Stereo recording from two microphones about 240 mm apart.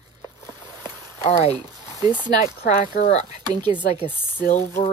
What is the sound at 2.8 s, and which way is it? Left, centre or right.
Speech, left.